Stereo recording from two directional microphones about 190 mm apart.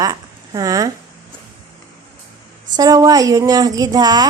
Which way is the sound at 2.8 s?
20° right (ahead or behind).